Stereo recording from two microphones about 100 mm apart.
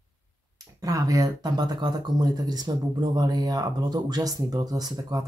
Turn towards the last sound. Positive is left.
turn(degrees=-40)  # may be behind; listen again after turning